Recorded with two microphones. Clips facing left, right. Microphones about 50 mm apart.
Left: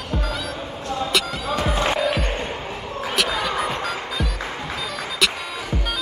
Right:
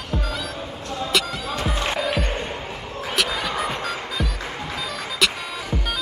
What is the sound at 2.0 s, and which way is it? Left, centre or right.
Music, centre.